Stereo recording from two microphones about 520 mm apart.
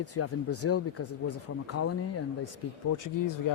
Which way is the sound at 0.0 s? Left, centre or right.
Left.